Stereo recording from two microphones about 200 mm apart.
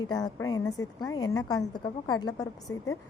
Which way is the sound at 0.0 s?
20° left (ahead or behind).